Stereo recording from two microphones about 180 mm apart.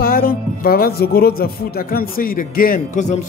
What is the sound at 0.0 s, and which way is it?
Speech, 55° left (ahead or behind).